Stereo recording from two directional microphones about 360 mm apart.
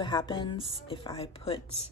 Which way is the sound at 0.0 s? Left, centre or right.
Centre.